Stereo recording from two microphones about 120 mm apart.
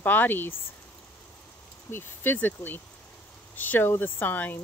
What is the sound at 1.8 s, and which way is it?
Speech, 20° left (ahead or behind).